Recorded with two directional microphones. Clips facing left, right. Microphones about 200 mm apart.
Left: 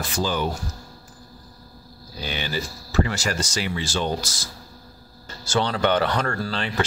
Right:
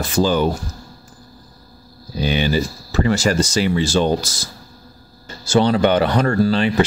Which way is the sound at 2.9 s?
30° right (ahead or behind).